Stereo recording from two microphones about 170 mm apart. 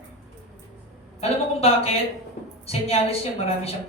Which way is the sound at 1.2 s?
35° left (ahead or behind).